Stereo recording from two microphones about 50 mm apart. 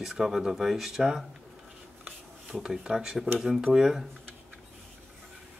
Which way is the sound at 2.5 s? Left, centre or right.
Centre.